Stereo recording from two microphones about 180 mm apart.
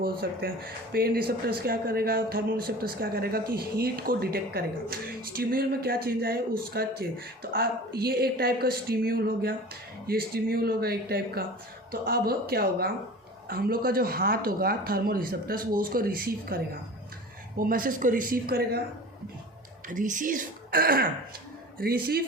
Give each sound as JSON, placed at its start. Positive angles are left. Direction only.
{"t": 0.0, "sound": "speech", "side_deg": -55}
{"t": 17.6, "sound": "speech", "side_deg": -50}
{"t": 19.9, "sound": "speech", "side_deg": -45}